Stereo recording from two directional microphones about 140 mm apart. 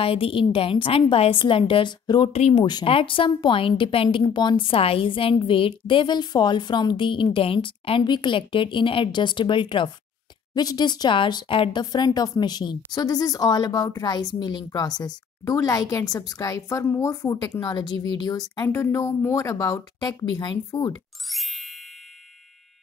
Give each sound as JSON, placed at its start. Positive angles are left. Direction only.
{"t": 0.0, "sound": "a woman's voice", "side_deg": 40}
{"t": 2.3, "sound": "speech", "side_deg": 50}
{"t": 2.6, "sound": "a woman's voice", "side_deg": 35}
{"t": 11.8, "sound": "a woman's voice", "side_deg": 30}
{"t": 21.3, "sound": "music", "side_deg": 0}